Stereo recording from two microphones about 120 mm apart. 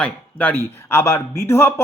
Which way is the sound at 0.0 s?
15° left (ahead or behind).